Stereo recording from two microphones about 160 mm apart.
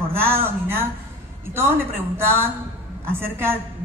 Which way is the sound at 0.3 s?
15° right (ahead or behind).